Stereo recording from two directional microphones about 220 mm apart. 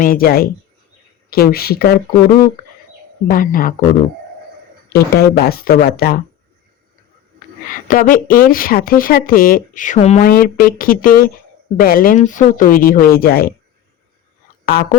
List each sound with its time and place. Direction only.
0.0 s speech: 40° left (ahead or behind)
3.2 s speech: 40° left (ahead or behind)
4.9 s speech: 45° left (ahead or behind)
7.3 s speech: 35° left (ahead or behind)
14.6 s a sound: 45° left (ahead or behind)